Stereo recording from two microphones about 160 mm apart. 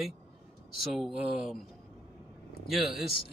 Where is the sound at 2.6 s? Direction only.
Centre (ahead or behind).